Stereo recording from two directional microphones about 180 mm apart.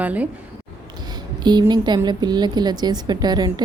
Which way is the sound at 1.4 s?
25° right (ahead or behind).